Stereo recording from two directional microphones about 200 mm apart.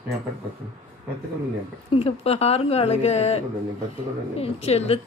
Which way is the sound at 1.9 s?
30° left (ahead or behind).